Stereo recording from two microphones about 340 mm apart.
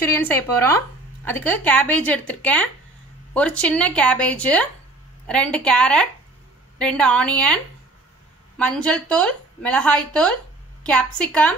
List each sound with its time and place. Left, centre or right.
0.1 s speech: centre